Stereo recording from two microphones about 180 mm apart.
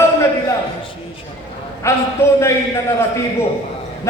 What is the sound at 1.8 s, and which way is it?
Speech, 15° left (ahead or behind).